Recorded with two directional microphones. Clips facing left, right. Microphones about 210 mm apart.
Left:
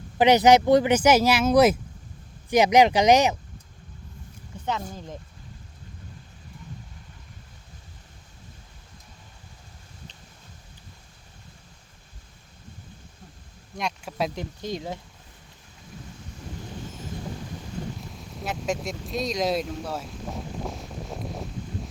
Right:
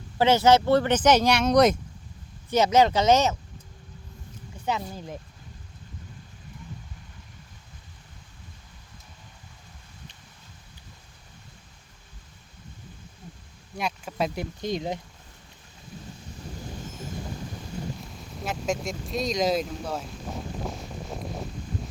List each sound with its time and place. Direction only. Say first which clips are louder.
0.2 s speech: left 2 dB; 15° left (ahead or behind)
13.7 s speech: even; centre (ahead or behind)
14.6 s speech: right 3 dB; 15° right (ahead or behind)
18.1 s speech: even; centre (ahead or behind)